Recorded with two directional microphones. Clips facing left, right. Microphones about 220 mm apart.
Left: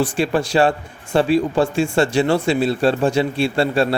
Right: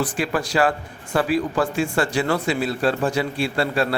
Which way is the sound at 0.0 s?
30° left (ahead or behind).